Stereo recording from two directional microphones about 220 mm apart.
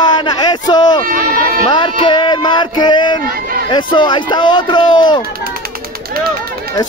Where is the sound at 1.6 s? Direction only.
20° left (ahead or behind).